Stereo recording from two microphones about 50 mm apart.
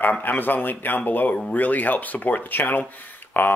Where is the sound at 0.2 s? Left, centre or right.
Left.